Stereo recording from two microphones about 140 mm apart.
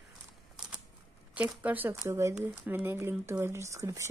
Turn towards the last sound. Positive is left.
turn(degrees=-20)  # may be behind; listen again after turning